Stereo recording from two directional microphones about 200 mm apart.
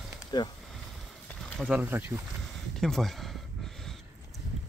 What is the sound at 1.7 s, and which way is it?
Speech, 10° right (ahead or behind).